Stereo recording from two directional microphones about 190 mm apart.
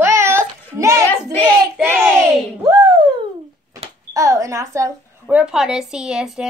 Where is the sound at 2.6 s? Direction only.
20° right (ahead or behind).